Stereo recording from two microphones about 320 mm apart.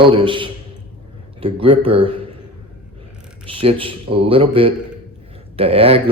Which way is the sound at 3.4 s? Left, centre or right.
Centre.